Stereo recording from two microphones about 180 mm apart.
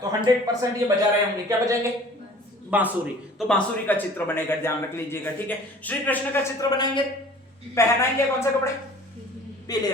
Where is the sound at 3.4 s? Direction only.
5° left (ahead or behind).